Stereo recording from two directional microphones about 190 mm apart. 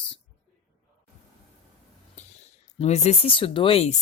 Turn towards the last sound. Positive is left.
turn(degrees=30)  # may be behind; listen again after turning